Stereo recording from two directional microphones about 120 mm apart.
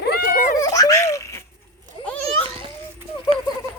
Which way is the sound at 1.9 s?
90° right.